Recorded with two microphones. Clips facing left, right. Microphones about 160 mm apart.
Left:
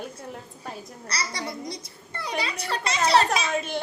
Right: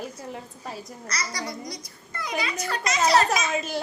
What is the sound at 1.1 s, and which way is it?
A child's voice, 30° left (ahead or behind).